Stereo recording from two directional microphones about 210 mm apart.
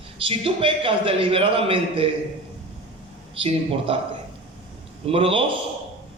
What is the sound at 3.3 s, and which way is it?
Speech, 25° right (ahead or behind).